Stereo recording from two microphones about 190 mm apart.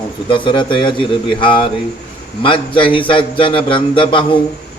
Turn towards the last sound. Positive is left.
turn(degrees=25)  # may be behind; listen again after turning